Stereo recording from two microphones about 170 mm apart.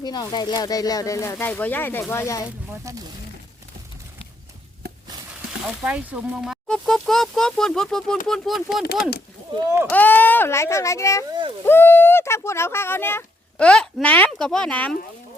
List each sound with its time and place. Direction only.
0.0 s speech: 25° left (ahead or behind)
2.8 s speech: 20° right (ahead or behind)
5.6 s speech: 10° right (ahead or behind)
9.9 s speech: 10° left (ahead or behind)
11.3 s speech: 25° right (ahead or behind)
11.6 s speech: 15° left (ahead or behind)